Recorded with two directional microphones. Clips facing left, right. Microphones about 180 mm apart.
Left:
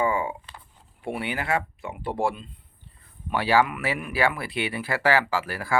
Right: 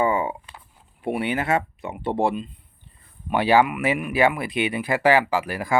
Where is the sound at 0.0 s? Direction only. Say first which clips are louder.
Right 3 dB; 20° right (ahead or behind).